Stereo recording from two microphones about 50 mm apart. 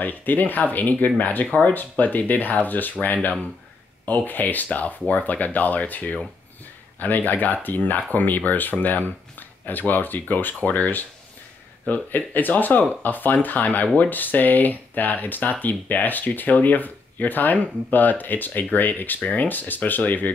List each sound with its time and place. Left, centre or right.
0.0 s speech: left